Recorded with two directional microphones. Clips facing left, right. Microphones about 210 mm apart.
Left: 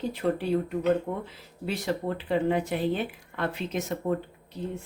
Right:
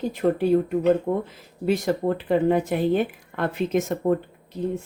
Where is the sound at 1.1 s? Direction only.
50° right (ahead or behind).